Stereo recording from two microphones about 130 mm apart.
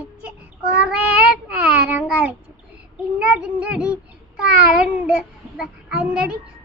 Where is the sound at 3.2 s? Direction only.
10° right (ahead or behind).